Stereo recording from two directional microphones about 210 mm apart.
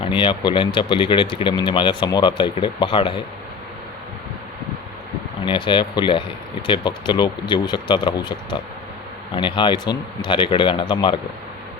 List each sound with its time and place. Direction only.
0.0 s speech: 25° left (ahead or behind)
5.5 s speech: 25° left (ahead or behind)